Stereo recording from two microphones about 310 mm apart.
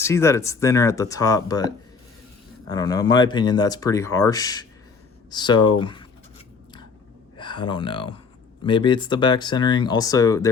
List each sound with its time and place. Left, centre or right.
0.0 s speech: centre
2.6 s speech: centre
7.3 s speech: centre